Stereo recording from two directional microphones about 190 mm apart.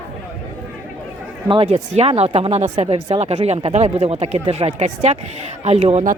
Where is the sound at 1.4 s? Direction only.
30° right (ahead or behind).